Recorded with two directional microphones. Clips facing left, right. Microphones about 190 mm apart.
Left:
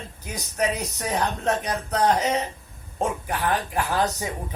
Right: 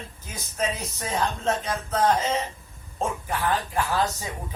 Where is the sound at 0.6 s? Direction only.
15° left (ahead or behind).